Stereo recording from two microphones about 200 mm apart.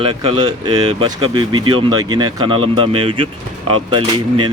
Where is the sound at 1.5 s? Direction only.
90° right.